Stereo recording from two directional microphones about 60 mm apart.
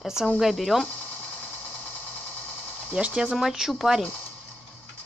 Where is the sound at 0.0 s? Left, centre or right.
Centre.